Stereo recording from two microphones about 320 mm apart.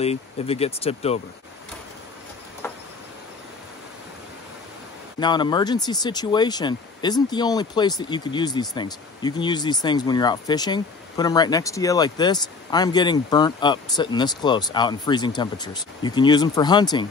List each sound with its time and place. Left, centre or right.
0.0 s speech: centre
2.6 s a sound: centre
5.2 s speech: centre